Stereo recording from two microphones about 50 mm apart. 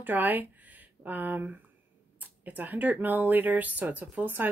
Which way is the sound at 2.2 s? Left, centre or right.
Right.